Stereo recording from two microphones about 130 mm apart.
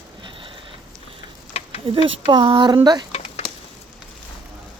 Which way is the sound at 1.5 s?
55° left (ahead or behind).